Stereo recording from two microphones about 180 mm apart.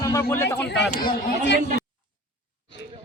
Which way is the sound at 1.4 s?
75° left (ahead or behind).